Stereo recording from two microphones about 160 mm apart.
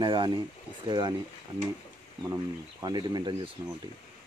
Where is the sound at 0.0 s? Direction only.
30° right (ahead or behind).